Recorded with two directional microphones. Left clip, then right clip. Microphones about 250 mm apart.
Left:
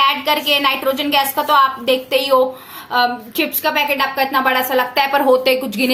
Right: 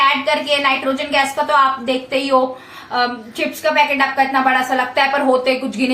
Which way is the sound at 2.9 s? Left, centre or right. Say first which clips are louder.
Left 3 dB; left.